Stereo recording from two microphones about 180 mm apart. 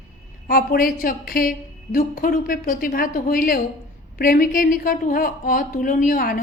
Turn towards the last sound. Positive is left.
turn(degrees=50)  # may be behind; listen again after turning